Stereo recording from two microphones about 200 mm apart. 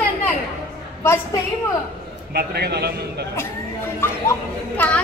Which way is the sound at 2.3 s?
50° right (ahead or behind).